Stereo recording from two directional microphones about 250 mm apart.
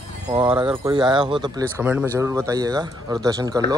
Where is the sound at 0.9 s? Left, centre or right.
Centre.